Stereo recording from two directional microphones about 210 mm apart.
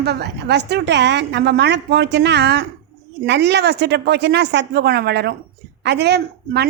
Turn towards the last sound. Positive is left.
turn(degrees=-50)  # may be behind; listen again after turning